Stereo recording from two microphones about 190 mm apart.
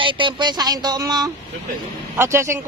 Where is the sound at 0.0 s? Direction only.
25° right (ahead or behind).